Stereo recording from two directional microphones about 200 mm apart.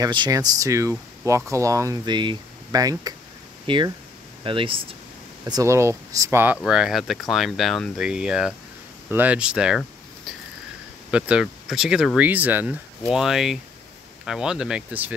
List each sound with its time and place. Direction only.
0.0 s speech: 20° right (ahead or behind)
5.4 s speech: 15° right (ahead or behind)
11.1 s speech: 5° right (ahead or behind)